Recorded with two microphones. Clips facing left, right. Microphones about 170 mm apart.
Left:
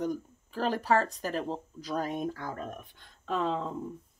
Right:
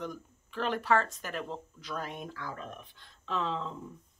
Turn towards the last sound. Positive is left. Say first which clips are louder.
# left 3 dB
turn(degrees=50)  # may be behind; listen again after turning